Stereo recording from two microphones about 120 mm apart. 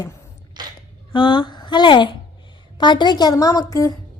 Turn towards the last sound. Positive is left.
turn(degrees=25)  # may be behind; listen again after turning